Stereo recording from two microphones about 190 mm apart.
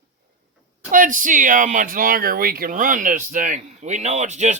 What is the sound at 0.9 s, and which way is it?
Speech, 45° right (ahead or behind).